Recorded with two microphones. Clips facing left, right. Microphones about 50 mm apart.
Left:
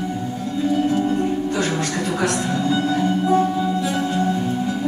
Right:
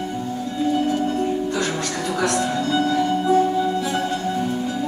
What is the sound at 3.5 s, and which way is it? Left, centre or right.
Music, centre.